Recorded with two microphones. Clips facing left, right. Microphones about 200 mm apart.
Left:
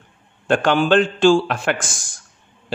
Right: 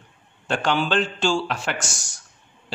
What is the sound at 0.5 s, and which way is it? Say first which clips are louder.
Speech: left 7 dB; 50° left (ahead or behind).